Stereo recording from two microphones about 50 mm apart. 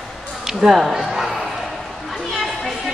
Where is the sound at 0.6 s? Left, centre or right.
Centre.